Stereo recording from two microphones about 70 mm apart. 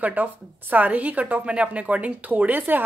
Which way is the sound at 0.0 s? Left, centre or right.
Right.